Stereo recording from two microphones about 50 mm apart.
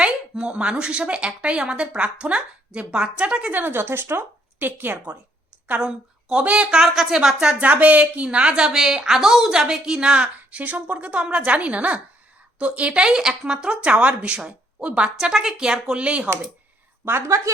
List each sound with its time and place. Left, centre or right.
0.0 s a sound: right
0.7 s a woman's voice: centre
3.7 s speech: right
5.8 s a woman's voice: centre
7.6 s a woman's voice: right
15.2 s speech: centre
17.1 s a woman's voice: right